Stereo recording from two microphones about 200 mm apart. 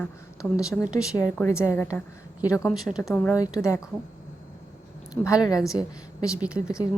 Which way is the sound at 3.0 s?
10° left (ahead or behind).